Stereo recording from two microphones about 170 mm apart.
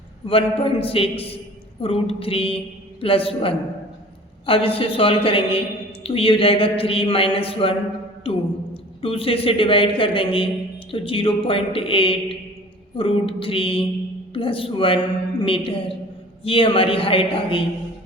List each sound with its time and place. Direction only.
0.3 s a woman's voice: 35° left (ahead or behind)